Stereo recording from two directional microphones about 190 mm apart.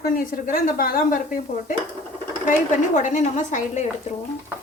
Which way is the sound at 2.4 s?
40° left (ahead or behind).